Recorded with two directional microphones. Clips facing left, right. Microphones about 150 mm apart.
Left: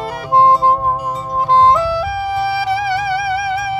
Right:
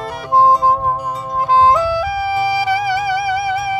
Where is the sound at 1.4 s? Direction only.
Centre (ahead or behind).